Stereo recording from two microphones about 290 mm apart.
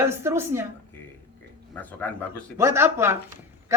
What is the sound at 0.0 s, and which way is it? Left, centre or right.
Speech, centre.